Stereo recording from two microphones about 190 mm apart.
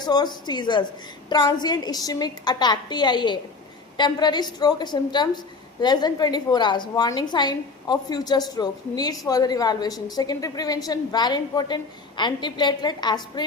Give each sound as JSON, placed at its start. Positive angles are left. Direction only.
{"t": 0.0, "sound": "a woman's voice", "side_deg": 20}